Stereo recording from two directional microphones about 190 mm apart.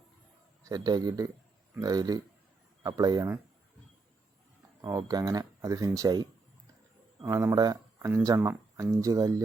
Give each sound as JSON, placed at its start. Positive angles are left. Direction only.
{"t": 0.6, "sound": "speech", "side_deg": -20}
{"t": 4.8, "sound": "speech", "side_deg": -20}